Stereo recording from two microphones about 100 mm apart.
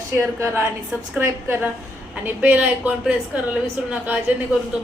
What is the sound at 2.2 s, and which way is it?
Speech, 20° right (ahead or behind).